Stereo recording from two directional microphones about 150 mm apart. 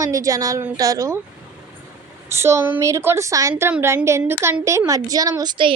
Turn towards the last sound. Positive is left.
turn(degrees=-30)  # may be behind; listen again after turning